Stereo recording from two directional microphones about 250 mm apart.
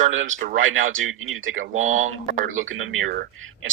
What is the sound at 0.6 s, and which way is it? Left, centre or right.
Speech, right.